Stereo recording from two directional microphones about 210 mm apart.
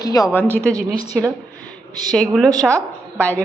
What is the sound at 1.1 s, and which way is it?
A woman's voice, centre (ahead or behind).